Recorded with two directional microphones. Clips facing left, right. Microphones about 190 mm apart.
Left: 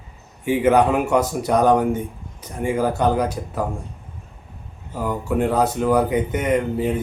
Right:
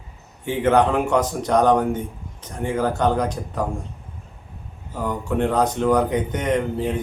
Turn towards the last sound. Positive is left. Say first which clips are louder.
# left 2 dB
turn(degrees=10)  # may be behind; listen again after turning